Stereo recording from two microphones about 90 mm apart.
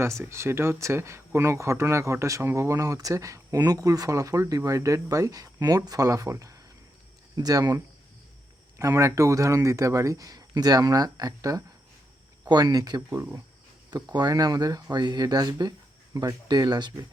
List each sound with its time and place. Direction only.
0.0 s speech: 30° right (ahead or behind)
8.8 s speech: 35° right (ahead or behind); by 17.1 s 50° right (ahead or behind)